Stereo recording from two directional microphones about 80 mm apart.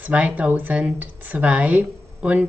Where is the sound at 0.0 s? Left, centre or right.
Centre.